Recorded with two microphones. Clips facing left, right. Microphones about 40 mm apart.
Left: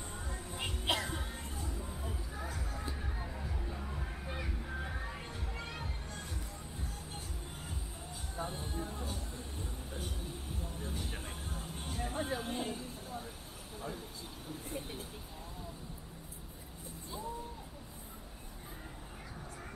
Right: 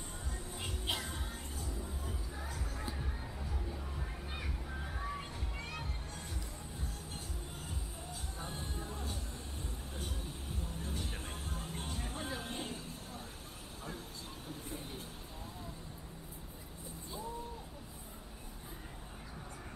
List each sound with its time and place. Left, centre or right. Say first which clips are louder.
0.9 s music: left 5 dB; left
1.7 s music: left 1 dB; centre
8.4 s music: left 6 dB; centre